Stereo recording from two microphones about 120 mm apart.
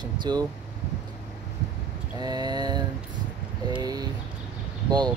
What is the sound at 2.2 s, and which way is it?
Speech, 35° right (ahead or behind).